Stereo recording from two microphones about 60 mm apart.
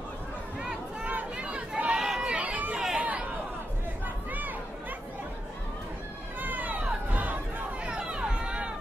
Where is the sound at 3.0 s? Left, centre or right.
Right.